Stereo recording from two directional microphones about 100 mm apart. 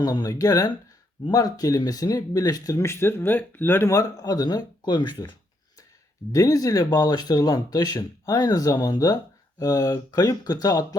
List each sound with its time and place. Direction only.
0.0 s speech: 40° left (ahead or behind); by 3.8 s 20° left (ahead or behind)
3.8 s speech: 35° left (ahead or behind)
6.3 s speech: 35° left (ahead or behind)